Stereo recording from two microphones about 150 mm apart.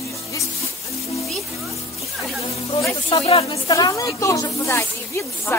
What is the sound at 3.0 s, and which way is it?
Speech, 35° left (ahead or behind).